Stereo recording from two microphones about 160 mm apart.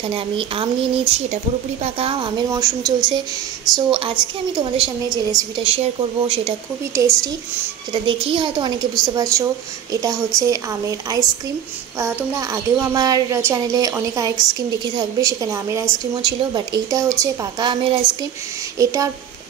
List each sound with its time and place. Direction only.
0.1 s a woman's voice: 35° right (ahead or behind)
6.9 s a child's voice: 20° right (ahead or behind)
7.9 s a child's voice: 35° right (ahead or behind)
18.8 s a child's voice: 20° right (ahead or behind)